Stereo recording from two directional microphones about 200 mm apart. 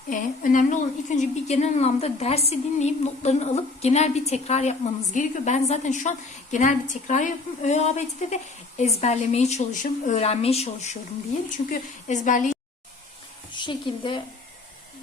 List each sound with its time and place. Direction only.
0.1 s a woman's voice: 40° left (ahead or behind)
13.5 s a woman's voice: 25° left (ahead or behind)